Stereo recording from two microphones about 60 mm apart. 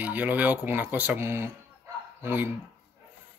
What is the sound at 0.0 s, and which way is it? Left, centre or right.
Speech, right.